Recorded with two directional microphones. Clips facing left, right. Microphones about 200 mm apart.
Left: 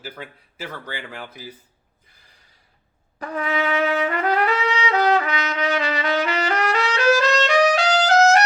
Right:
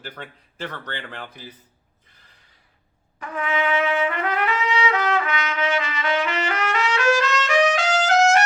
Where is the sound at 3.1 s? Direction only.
35° left (ahead or behind).